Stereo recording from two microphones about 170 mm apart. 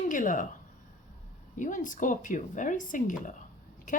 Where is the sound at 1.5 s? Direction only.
50° left (ahead or behind).